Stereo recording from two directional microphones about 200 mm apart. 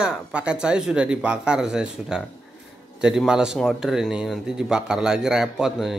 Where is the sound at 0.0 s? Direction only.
5° right (ahead or behind).